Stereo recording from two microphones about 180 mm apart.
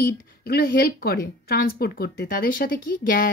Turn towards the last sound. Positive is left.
turn(degrees=50)  # may be behind; listen again after turning